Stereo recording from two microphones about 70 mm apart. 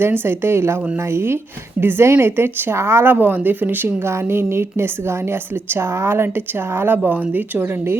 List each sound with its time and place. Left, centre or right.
0.0 s speech: right
4.1 s speech: right